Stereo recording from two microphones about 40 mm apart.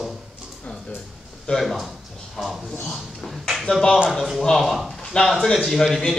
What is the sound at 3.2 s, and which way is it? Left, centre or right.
Speech, centre.